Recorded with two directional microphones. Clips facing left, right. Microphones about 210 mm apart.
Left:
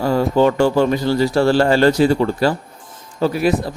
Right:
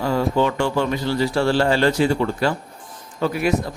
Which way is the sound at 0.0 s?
40° left (ahead or behind).